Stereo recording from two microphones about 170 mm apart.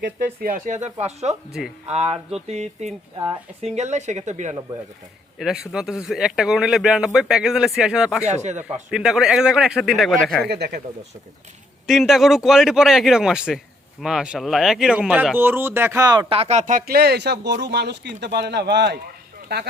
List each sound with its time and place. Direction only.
0.3 s speech: 55° right (ahead or behind)
5.4 s speech: 5° right (ahead or behind)
8.3 s speech: 45° right (ahead or behind)
8.6 s speech: 5° right (ahead or behind)
10.5 s speech: 70° right (ahead or behind)
11.9 s speech: centre (ahead or behind); by 19.6 s 70° right (ahead or behind)